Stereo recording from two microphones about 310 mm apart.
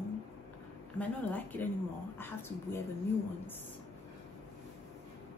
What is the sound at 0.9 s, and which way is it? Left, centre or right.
A woman's voice, centre.